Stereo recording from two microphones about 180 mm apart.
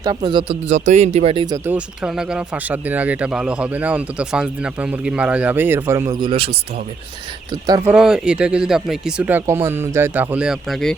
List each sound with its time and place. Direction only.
0.0 s speech: 20° right (ahead or behind)
0.7 s speech: 40° right (ahead or behind); by 1.7 s 20° right (ahead or behind)
1.7 s speech: 5° right (ahead or behind)
6.2 s speech: 30° right (ahead or behind)
7.9 s speech: 5° right (ahead or behind)